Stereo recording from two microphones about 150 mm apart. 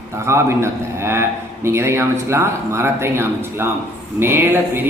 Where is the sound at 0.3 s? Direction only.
20° right (ahead or behind).